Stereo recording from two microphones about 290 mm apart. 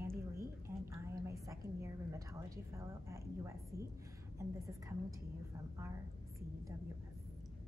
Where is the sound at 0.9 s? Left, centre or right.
Centre.